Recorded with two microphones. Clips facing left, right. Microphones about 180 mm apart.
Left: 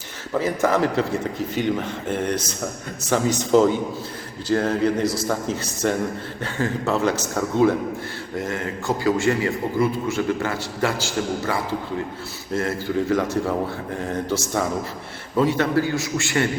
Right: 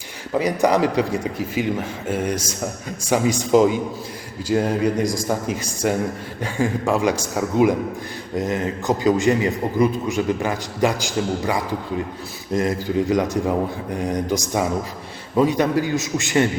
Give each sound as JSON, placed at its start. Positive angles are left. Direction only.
{"t": 0.3, "sound": "a man's voice", "side_deg": -15}